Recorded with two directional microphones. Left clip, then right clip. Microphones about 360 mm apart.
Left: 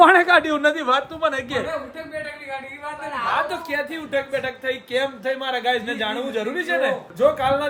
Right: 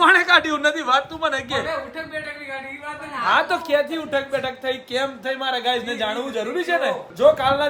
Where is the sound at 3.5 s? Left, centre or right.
Centre.